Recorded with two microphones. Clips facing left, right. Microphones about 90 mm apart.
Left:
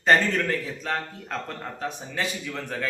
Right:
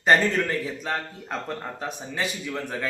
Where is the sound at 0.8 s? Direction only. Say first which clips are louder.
Even; 10° right (ahead or behind).